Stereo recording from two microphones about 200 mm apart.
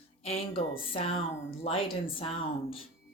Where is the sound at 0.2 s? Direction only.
30° left (ahead or behind).